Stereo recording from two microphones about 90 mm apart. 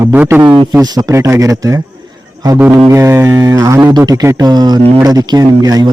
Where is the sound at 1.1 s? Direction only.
35° right (ahead or behind).